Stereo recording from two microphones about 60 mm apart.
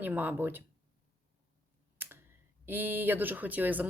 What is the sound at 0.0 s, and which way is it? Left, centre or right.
Speech, right.